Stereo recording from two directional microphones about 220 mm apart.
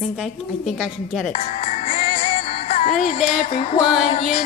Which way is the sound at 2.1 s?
45° left (ahead or behind).